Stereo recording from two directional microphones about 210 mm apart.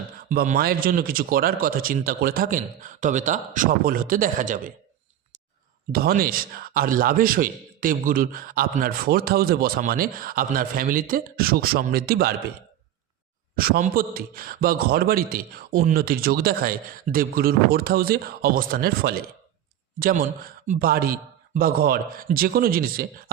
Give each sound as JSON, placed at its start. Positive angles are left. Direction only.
{"t": 0.3, "sound": "speech", "side_deg": -40}
{"t": 5.9, "sound": "a man's voice", "side_deg": -45}
{"t": 13.6, "sound": "a man's voice", "side_deg": -40}